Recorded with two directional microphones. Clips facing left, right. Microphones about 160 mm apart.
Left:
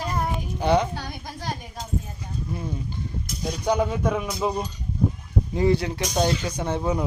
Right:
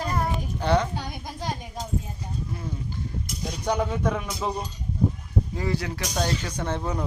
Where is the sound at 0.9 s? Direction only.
20° right (ahead or behind).